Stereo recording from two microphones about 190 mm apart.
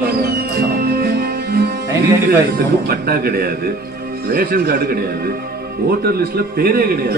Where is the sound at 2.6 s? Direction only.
55° right (ahead or behind).